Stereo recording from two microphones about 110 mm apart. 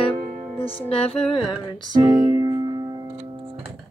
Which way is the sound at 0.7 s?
60° left (ahead or behind).